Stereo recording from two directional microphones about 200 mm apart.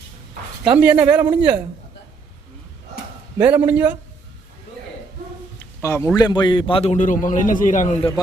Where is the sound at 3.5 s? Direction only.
10° right (ahead or behind).